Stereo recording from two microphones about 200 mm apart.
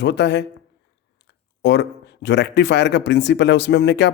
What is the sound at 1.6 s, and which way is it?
Speech, 60° left (ahead or behind).